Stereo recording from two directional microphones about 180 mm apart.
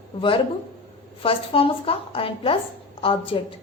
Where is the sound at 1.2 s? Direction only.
30° left (ahead or behind).